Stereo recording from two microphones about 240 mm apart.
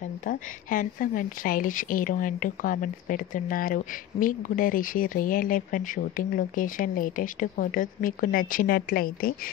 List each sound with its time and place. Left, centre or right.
0.2 s speech: left